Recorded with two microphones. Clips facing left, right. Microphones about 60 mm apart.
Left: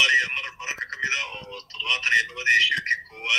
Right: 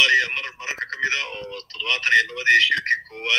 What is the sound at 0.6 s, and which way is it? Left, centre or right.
Radio, right.